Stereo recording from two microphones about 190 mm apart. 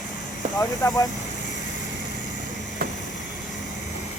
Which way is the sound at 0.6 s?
15° left (ahead or behind).